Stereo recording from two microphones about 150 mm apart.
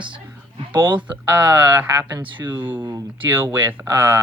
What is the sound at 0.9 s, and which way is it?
Speech, 10° right (ahead or behind).